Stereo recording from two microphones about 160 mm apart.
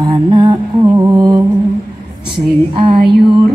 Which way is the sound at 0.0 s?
25° right (ahead or behind).